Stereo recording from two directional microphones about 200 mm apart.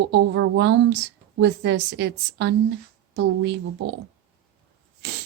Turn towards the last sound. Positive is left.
turn(degrees=-60)  # may be behind; listen again after turning